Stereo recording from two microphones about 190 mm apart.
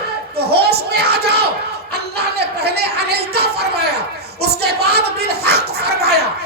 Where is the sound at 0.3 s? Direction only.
55° right (ahead or behind).